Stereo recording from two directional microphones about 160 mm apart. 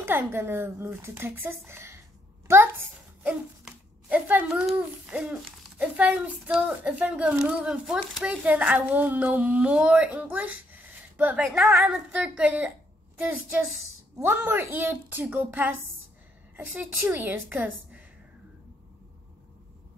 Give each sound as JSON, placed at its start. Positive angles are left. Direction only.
{"t": 0.0, "sound": "a child's voice", "side_deg": -15}